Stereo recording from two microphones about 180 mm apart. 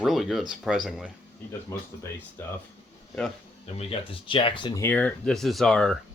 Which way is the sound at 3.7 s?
30° left (ahead or behind).